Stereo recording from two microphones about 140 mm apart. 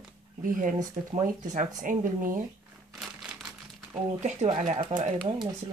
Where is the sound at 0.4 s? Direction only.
70° right (ahead or behind).